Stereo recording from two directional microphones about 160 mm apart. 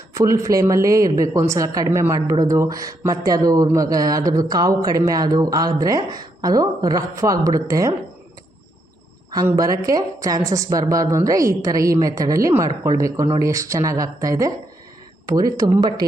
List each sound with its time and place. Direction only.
0.1 s speech: 20° right (ahead or behind)
9.5 s speech: 20° right (ahead or behind)